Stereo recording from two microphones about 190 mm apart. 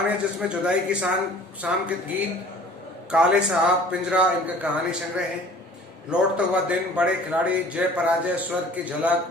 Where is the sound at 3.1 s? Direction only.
5° right (ahead or behind).